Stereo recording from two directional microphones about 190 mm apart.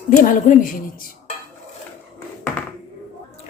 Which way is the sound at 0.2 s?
45° left (ahead or behind).